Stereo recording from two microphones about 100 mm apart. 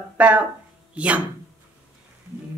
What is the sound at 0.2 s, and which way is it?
Speech, 15° right (ahead or behind).